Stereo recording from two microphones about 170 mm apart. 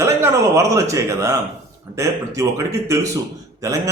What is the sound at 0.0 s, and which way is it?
Speech, 15° right (ahead or behind).